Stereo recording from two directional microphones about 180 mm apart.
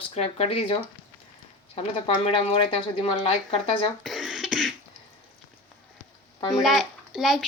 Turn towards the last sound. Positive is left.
turn(degrees=0)  # may be behind; listen again after turning